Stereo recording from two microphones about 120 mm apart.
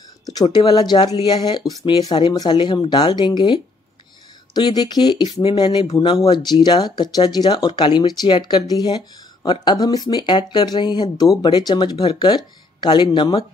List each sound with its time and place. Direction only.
0.3 s speech: 35° left (ahead or behind)